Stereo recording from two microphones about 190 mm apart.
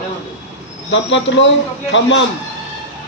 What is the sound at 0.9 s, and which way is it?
A man's voice, 75° left (ahead or behind).